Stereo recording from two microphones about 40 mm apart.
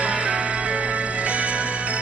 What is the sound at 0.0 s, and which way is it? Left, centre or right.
Music, right.